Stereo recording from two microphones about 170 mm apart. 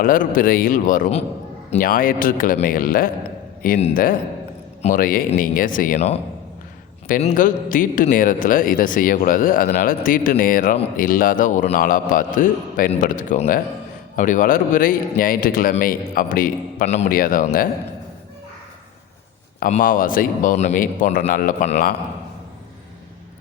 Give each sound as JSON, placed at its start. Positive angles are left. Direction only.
{"t": 0.0, "sound": "a man's voice", "side_deg": 55}
{"t": 7.2, "sound": "a man's voice", "side_deg": 55}
{"t": 17.2, "sound": "a man's voice", "side_deg": 55}
{"t": 19.7, "sound": "speech", "side_deg": 55}